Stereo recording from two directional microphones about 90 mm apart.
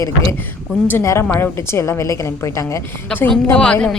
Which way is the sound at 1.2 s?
30° left (ahead or behind).